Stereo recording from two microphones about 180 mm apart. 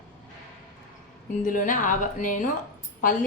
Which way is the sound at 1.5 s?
45° left (ahead or behind).